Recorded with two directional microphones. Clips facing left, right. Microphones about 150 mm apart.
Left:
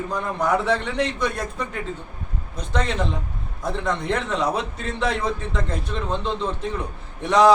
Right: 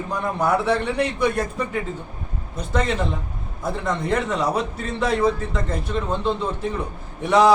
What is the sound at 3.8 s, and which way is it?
Speech, 5° right (ahead or behind).